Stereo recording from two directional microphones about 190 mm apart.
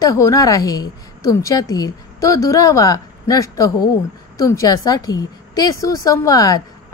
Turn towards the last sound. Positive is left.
turn(degrees=20)  # may be behind; listen again after turning